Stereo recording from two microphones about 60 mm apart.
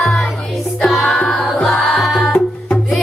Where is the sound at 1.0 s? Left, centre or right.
Centre.